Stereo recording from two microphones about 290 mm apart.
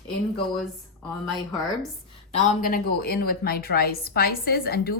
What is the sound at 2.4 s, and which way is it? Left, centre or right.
A woman's voice, left.